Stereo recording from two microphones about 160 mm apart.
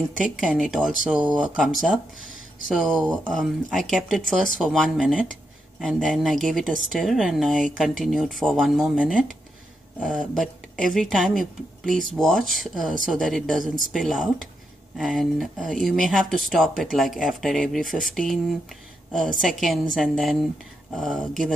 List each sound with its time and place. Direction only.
0.2 s speech: 5° right (ahead or behind)